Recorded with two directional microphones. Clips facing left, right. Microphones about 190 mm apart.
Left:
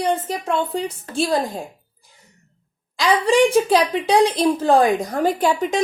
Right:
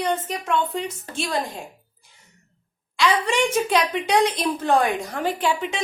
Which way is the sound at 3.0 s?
35° left (ahead or behind).